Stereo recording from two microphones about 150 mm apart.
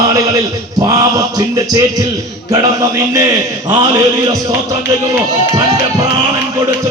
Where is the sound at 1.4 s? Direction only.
25° right (ahead or behind).